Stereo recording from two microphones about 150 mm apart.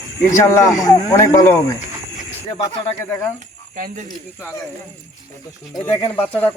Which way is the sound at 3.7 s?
60° right (ahead or behind).